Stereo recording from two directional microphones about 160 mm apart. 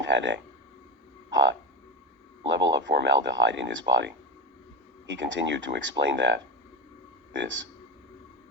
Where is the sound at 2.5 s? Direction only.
90° right.